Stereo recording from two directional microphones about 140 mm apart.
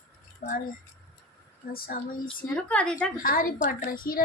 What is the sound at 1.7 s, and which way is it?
Speech, 90° left.